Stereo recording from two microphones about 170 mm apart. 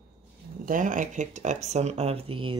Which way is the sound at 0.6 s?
50° right (ahead or behind).